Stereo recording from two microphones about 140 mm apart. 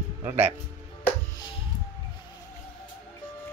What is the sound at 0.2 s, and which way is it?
Speech, 15° right (ahead or behind).